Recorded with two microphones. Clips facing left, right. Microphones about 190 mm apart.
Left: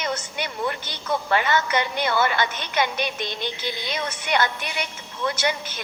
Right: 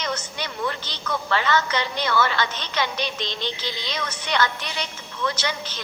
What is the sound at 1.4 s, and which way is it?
A woman's voice, 50° left (ahead or behind).